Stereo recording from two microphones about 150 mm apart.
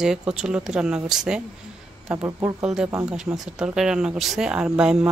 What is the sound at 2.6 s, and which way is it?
Speech, 5° right (ahead or behind).